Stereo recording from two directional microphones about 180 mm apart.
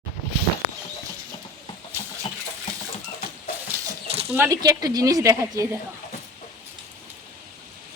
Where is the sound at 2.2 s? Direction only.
35° left (ahead or behind).